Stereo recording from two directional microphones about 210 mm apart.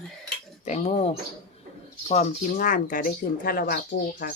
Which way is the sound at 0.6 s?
35° left (ahead or behind).